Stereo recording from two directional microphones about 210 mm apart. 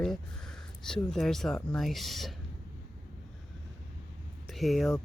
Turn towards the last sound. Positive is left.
turn(degrees=0)  # may be behind; listen again after turning